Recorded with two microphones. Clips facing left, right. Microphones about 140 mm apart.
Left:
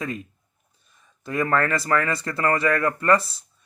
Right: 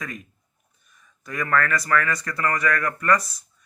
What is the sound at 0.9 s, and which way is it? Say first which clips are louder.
Speech: left 4 dB; 30° left (ahead or behind).